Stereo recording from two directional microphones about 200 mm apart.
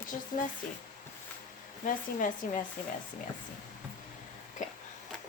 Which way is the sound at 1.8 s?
40° left (ahead or behind).